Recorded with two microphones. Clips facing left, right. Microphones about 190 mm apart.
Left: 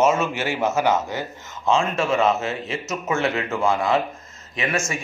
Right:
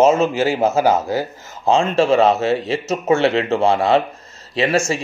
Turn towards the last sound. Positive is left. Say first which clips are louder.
# right 8 dB
turn(degrees=-30)  # may be behind; listen again after turning